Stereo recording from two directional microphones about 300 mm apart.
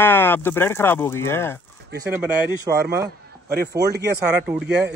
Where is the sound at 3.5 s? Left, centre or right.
Right.